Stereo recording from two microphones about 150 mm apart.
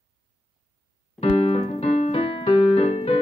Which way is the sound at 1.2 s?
45° left (ahead or behind).